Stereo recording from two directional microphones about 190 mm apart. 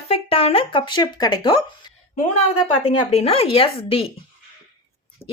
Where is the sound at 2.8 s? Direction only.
35° left (ahead or behind).